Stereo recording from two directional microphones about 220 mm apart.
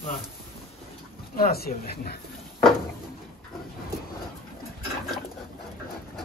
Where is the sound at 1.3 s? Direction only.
45° left (ahead or behind).